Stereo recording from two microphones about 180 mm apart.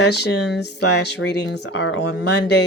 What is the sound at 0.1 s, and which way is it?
Speech, 70° left (ahead or behind).